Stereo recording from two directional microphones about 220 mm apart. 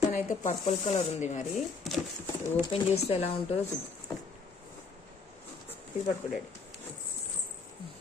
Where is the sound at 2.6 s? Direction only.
25° left (ahead or behind).